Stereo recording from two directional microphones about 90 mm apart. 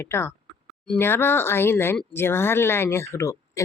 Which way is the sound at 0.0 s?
25° left (ahead or behind).